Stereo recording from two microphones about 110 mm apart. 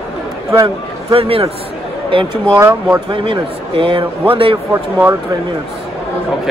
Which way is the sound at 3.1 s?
55° right (ahead or behind).